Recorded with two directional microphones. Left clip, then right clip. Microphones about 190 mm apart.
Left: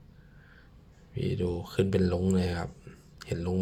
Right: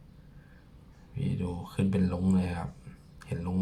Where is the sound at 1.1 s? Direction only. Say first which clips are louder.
Left 6 dB; 30° left (ahead or behind).